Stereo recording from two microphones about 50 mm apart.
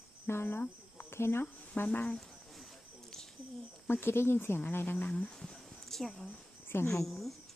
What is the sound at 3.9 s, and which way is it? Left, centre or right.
Speech, left.